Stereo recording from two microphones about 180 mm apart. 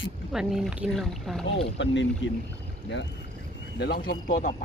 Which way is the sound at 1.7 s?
90° left.